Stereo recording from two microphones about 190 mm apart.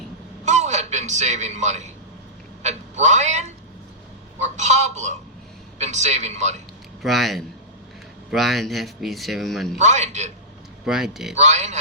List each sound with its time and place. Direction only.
0.4 s a sound: 40° right (ahead or behind)
2.6 s a man's voice: 40° right (ahead or behind)
7.0 s speech: centre (ahead or behind)
9.7 s speech: 40° right (ahead or behind)
10.8 s speech: centre (ahead or behind)
11.3 s speech: 40° right (ahead or behind)